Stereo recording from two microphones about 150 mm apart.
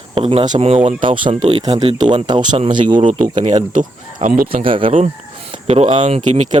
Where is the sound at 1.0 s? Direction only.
35° right (ahead or behind).